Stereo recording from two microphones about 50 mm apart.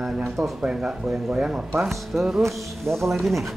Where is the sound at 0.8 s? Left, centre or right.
Centre.